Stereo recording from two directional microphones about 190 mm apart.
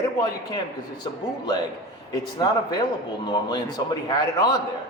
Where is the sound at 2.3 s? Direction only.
20° left (ahead or behind).